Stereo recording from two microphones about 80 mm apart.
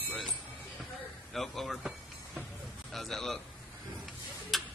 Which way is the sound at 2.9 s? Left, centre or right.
Centre.